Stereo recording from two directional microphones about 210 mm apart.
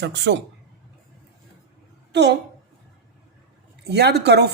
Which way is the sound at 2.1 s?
55° right (ahead or behind).